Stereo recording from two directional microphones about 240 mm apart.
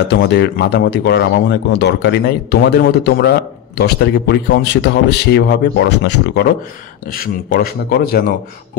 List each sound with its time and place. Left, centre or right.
0.1 s a man's voice: left